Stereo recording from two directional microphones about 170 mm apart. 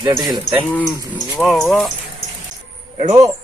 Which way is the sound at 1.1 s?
20° left (ahead or behind).